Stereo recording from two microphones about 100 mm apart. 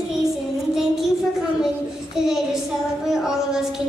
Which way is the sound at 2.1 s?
5° right (ahead or behind).